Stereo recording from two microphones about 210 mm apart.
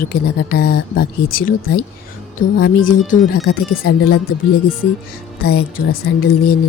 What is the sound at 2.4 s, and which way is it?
Speech, 65° left (ahead or behind).